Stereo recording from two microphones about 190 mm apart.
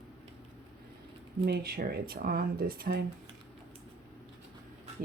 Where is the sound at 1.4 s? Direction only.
55° right (ahead or behind).